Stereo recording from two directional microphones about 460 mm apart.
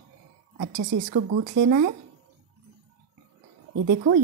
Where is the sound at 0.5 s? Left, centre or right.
Right.